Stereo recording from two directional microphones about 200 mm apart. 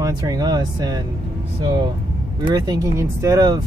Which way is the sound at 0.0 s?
20° right (ahead or behind).